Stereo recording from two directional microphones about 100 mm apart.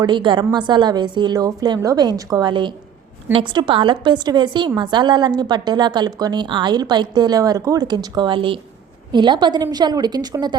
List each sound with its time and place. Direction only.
0.0 s a woman's voice: 50° right (ahead or behind)
9.1 s a woman's voice: 50° right (ahead or behind)